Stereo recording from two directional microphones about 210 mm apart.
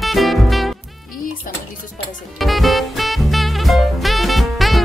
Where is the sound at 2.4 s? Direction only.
Centre (ahead or behind).